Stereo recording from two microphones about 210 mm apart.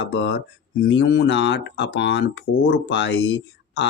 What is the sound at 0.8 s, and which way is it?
Speech, 60° left (ahead or behind).